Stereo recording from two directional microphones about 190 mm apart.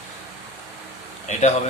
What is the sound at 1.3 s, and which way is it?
Speech, 40° left (ahead or behind).